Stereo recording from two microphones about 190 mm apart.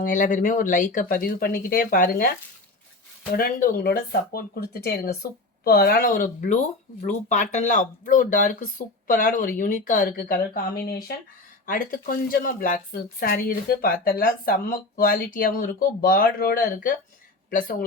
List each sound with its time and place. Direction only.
0.0 s a woman's voice: 45° left (ahead or behind)
3.3 s a woman's voice: 50° left (ahead or behind)